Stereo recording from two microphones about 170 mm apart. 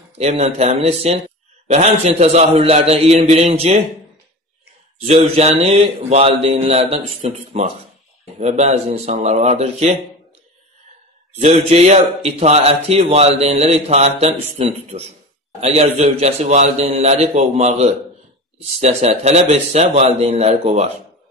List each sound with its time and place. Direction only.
0.2 s a man's voice: 40° right (ahead or behind)
5.0 s a man's voice: 40° right (ahead or behind)
11.3 s a man's voice: 40° right (ahead or behind)